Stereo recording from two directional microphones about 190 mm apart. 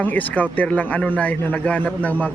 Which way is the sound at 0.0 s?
10° left (ahead or behind).